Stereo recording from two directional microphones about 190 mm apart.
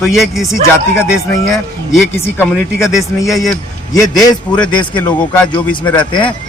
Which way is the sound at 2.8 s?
Centre (ahead or behind).